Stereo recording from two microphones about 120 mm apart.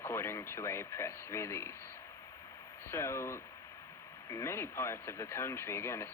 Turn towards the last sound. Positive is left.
turn(degrees=20)  # may be behind; listen again after turning